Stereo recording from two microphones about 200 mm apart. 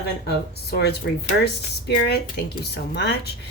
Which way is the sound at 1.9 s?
55° left (ahead or behind).